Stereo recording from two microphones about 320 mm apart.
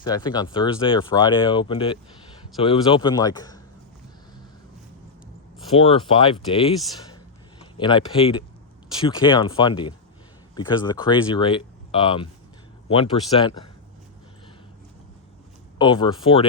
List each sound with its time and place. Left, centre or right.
0.0 s speech: centre
5.7 s speech: centre
15.8 s speech: centre